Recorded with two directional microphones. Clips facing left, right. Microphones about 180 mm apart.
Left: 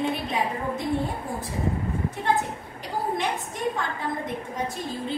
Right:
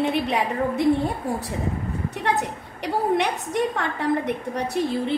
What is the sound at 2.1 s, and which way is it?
A woman's voice, 70° right (ahead or behind).